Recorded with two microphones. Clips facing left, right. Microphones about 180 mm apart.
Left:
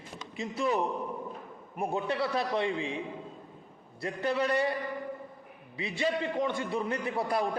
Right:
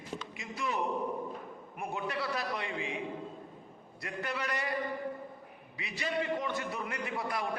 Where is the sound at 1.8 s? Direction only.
30° left (ahead or behind).